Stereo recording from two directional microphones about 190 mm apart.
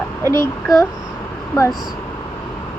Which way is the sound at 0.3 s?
15° left (ahead or behind).